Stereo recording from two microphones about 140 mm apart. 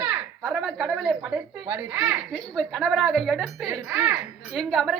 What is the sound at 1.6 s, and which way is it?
Speech, 15° right (ahead or behind).